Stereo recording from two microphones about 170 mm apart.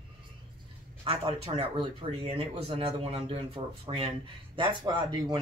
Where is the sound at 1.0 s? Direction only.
35° right (ahead or behind).